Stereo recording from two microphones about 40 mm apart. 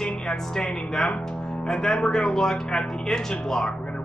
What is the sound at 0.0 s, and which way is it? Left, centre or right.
Speech, centre.